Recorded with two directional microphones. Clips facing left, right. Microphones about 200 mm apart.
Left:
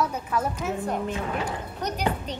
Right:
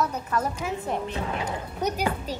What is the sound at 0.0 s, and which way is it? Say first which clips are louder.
Speech: even; 10° left (ahead or behind).